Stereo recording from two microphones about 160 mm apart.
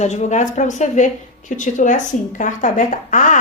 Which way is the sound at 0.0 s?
45° left (ahead or behind).